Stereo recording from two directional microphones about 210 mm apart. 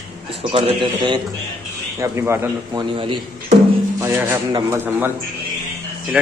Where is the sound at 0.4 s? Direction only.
25° right (ahead or behind).